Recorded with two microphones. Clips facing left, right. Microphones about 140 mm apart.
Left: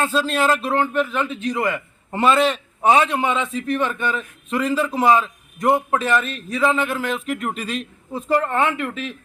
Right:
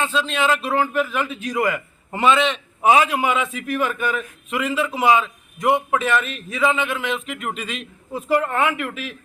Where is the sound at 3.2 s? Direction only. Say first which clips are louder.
Even; 30° left (ahead or behind).